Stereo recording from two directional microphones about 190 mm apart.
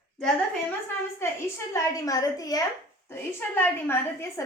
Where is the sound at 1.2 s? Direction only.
15° left (ahead or behind).